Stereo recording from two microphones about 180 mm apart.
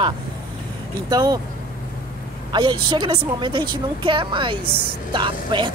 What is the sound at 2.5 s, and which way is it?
A woman's voice, 25° right (ahead or behind).